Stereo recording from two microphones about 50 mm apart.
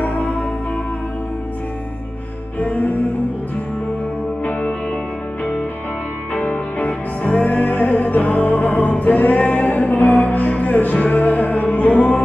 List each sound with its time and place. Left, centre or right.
0.0 s music: left
2.6 s music: left
4.5 s music: left
6.5 s music: left